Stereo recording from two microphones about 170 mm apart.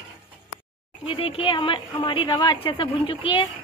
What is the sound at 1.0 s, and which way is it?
A woman's voice, 35° left (ahead or behind).